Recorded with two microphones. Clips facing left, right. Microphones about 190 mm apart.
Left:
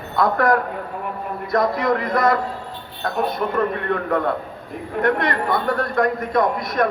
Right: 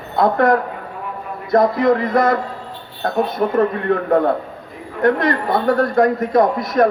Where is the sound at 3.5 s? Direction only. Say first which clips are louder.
Right 7 dB; 35° right (ahead or behind).